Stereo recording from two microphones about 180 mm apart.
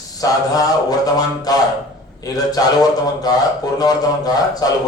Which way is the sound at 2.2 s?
20° left (ahead or behind).